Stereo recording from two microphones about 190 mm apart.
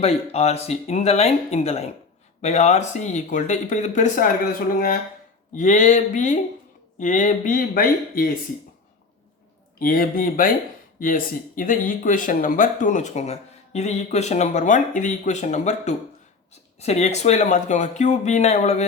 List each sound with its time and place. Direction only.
0.0 s speech: 35° left (ahead or behind)
5.5 s speech: 40° left (ahead or behind)
9.7 s speech: 50° left (ahead or behind)